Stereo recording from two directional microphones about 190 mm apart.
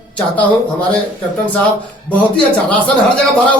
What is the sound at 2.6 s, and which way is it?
Speech, 5° left (ahead or behind).